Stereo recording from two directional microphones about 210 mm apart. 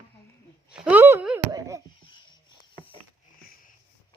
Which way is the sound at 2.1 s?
20° left (ahead or behind).